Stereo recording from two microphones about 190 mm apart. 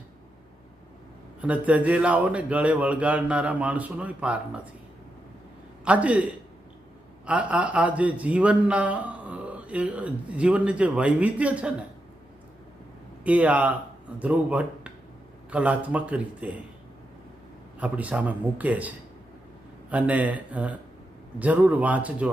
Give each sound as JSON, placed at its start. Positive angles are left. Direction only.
{"t": 1.4, "sound": "speech", "side_deg": -5}
{"t": 5.8, "sound": "a man's voice", "side_deg": -5}
{"t": 7.3, "sound": "speech", "side_deg": -5}
{"t": 13.2, "sound": "speech", "side_deg": -5}
{"t": 17.7, "sound": "speech", "side_deg": -5}
{"t": 19.9, "sound": "speech", "side_deg": -5}